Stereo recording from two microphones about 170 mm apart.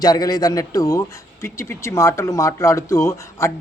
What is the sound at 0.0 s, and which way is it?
A man's voice, 25° left (ahead or behind).